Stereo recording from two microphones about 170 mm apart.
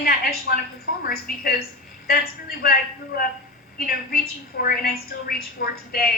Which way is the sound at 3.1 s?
60° left (ahead or behind).